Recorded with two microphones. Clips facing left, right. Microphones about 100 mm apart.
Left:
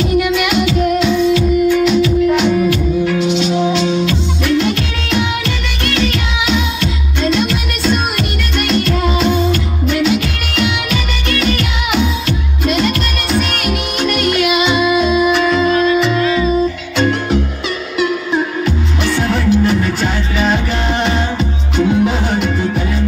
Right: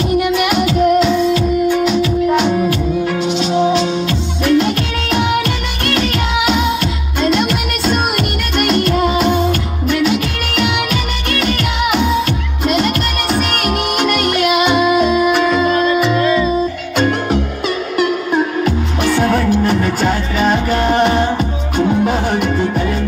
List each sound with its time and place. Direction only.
0.2 s music: 40° right (ahead or behind)
16.9 s music: 50° right (ahead or behind)
19.0 s music: 45° right (ahead or behind)